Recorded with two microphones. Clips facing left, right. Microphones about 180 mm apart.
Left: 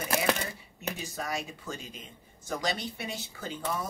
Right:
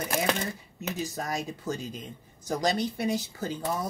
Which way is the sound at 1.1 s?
40° right (ahead or behind).